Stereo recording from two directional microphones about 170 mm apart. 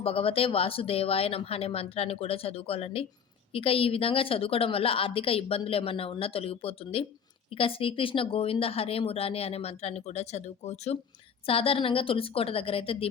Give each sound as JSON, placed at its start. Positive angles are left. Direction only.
{"t": 0.0, "sound": "a woman's voice", "side_deg": 35}